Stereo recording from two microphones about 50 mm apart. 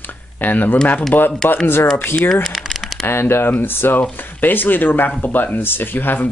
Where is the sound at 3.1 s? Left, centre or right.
Left.